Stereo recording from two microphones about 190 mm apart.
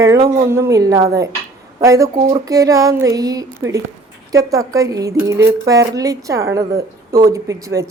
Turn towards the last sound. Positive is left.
turn(degrees=-15)  # may be behind; listen again after turning